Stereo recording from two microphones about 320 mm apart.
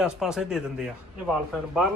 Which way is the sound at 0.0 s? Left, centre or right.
Centre.